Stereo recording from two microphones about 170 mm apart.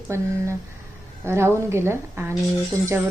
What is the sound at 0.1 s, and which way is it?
A woman's voice, 15° right (ahead or behind).